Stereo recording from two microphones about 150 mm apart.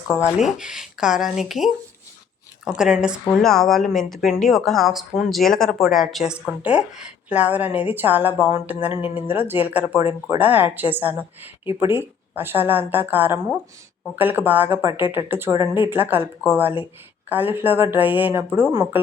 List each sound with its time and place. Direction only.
0.4 s speech: 5° right (ahead or behind)
8.9 s speech: 35° left (ahead or behind)
9.1 s speech: 15° right (ahead or behind)